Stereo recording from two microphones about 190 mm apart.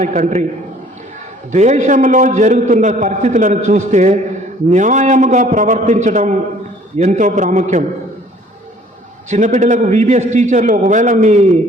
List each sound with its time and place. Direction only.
0.0 s a man's voice: 40° right (ahead or behind)
1.5 s a man's voice: 40° right (ahead or behind)
9.3 s a man's voice: 40° right (ahead or behind)